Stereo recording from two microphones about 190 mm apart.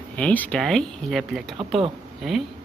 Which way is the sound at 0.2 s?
5° left (ahead or behind).